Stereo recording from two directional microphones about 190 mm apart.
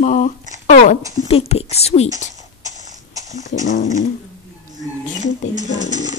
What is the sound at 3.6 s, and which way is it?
Dog, 40° left (ahead or behind).